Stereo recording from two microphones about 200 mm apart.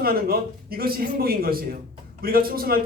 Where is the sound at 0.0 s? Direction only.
50° right (ahead or behind).